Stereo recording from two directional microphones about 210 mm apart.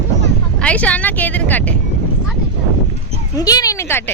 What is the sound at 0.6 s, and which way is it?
Speech, 5° left (ahead or behind).